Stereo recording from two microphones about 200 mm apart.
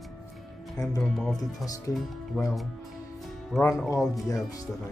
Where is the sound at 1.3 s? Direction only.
15° left (ahead or behind).